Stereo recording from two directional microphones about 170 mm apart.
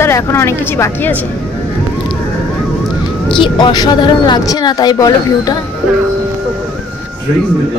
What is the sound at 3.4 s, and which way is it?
A woman's voice, 25° left (ahead or behind).